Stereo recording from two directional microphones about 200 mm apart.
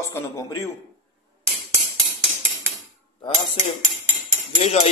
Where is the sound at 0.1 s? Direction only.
15° left (ahead or behind).